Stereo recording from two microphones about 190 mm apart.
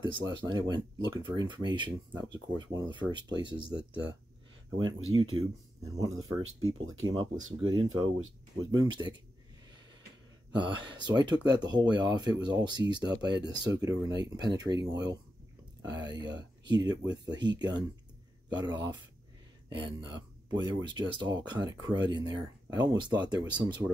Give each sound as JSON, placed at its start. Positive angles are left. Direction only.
{"t": 0.0, "sound": "speech", "side_deg": -25}
{"t": 5.1, "sound": "speech", "side_deg": -90}
{"t": 6.4, "sound": "speech", "side_deg": -90}
{"t": 7.6, "sound": "speech", "side_deg": -25}
{"t": 10.5, "sound": "speech", "side_deg": -25}